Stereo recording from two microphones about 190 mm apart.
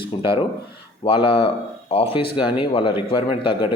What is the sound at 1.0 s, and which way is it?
Speech, 30° left (ahead or behind).